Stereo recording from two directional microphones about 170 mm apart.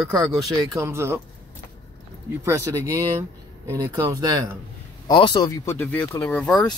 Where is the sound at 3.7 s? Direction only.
25° right (ahead or behind).